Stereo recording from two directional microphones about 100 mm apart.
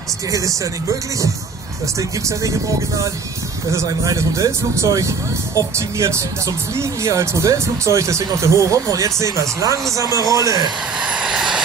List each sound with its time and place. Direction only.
0.3 s speech: 30° right (ahead or behind)
3.7 s speech: 30° right (ahead or behind)
11.0 s vehicle: 10° right (ahead or behind)